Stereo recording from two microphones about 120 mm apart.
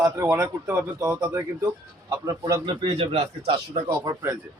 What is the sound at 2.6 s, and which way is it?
Speech, 50° right (ahead or behind).